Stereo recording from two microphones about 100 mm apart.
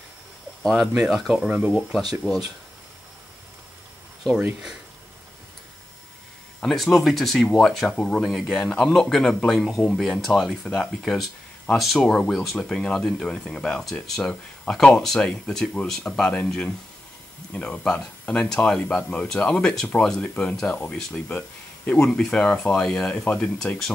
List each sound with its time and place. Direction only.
0.7 s speech: 5° right (ahead or behind)
1.7 s speech: centre (ahead or behind)
4.4 s speech: 10° right (ahead or behind)
6.6 s speech: centre (ahead or behind)